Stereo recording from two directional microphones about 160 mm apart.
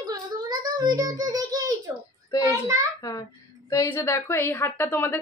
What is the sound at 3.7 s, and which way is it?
A woman's voice, 20° left (ahead or behind).